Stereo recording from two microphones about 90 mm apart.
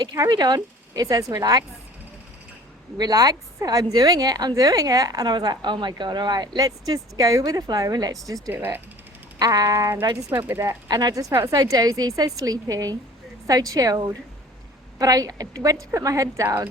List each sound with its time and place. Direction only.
0.0 s a woman's voice: 45° right (ahead or behind)
3.0 s a woman's voice: 45° right (ahead or behind)
10.4 s a woman's voice: 30° right (ahead or behind)
10.8 s a woman's voice: 45° right (ahead or behind)